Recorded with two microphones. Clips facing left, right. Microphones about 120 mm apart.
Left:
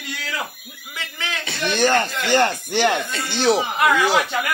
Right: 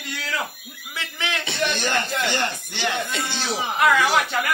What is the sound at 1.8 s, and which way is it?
Speech, 55° left (ahead or behind).